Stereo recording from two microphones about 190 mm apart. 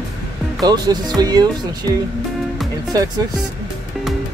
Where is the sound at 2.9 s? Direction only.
20° right (ahead or behind).